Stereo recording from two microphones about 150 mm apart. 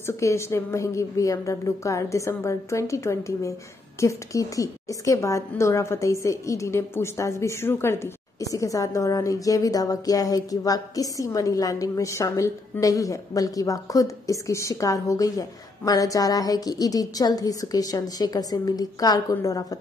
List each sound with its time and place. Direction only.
0.0 s a woman's voice: 20° left (ahead or behind)